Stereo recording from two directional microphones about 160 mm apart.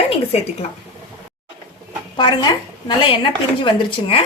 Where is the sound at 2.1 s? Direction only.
30° left (ahead or behind).